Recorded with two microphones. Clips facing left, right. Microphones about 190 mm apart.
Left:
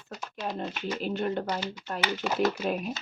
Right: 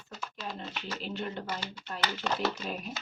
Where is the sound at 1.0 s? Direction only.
50° left (ahead or behind).